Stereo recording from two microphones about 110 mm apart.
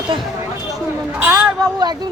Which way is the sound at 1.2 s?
15° right (ahead or behind).